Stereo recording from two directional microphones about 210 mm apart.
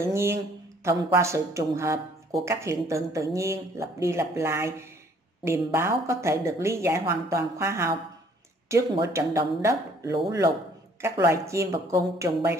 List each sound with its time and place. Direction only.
0.0 s speech: 15° right (ahead or behind)